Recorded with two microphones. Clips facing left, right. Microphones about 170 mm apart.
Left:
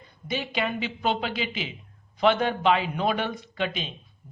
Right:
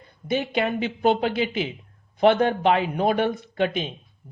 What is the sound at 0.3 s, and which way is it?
A man's voice, 50° right (ahead or behind).